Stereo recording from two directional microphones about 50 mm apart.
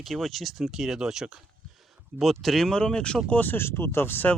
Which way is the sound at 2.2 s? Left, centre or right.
Centre.